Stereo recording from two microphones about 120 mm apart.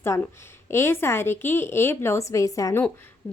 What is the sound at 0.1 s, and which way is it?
A woman's voice, 25° left (ahead or behind).